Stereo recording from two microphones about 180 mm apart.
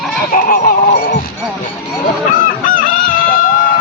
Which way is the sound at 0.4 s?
50° left (ahead or behind).